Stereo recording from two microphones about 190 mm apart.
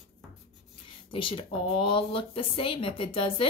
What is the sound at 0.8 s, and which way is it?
Speech, 25° left (ahead or behind).